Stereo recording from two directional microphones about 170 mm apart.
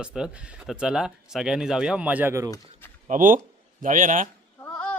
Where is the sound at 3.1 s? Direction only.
55° right (ahead or behind).